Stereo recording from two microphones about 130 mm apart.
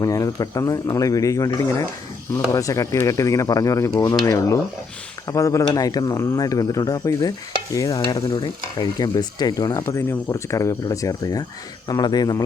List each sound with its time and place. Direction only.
0.0 s speech: 25° left (ahead or behind)